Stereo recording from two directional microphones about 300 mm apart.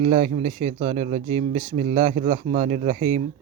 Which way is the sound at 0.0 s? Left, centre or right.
Right.